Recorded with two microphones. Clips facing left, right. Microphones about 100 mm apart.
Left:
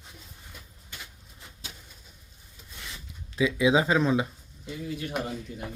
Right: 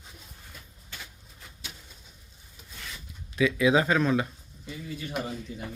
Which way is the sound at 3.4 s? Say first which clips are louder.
Even; 20° left (ahead or behind).